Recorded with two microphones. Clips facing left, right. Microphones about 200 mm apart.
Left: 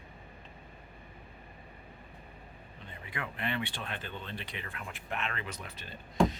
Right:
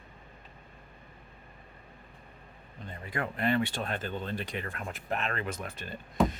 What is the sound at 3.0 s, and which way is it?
Speech, 40° right (ahead or behind).